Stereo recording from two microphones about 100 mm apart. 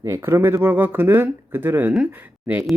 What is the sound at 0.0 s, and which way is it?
Speech, 25° right (ahead or behind).